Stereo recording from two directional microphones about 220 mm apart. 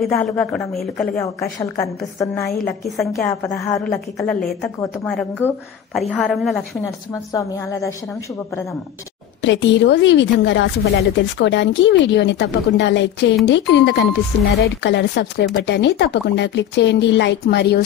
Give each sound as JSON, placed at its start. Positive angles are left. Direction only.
{"t": 0.0, "sound": "speech", "side_deg": 5}
{"t": 1.2, "sound": "a woman's voice", "side_deg": 15}
{"t": 2.4, "sound": "a woman's voice", "side_deg": 0}
{"t": 5.9, "sound": "speech", "side_deg": 0}
{"t": 7.3, "sound": "a woman's voice", "side_deg": 15}
{"t": 9.4, "sound": "a woman's voice", "side_deg": 55}